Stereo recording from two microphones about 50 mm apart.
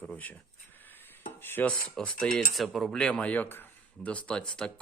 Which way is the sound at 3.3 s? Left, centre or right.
Left.